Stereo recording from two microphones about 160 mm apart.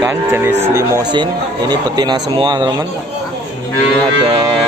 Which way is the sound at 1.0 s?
25° right (ahead or behind).